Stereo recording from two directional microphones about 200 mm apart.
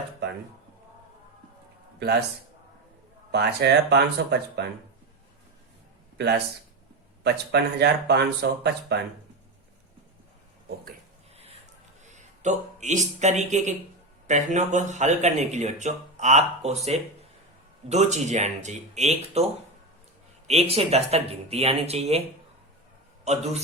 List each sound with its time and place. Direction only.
3.3 s speech: 55° right (ahead or behind)
6.1 s speech: 55° right (ahead or behind)
12.0 s speech: 35° right (ahead or behind)
17.8 s speech: 35° right (ahead or behind)
20.5 s speech: 30° right (ahead or behind)
23.2 s a man's voice: 35° right (ahead or behind)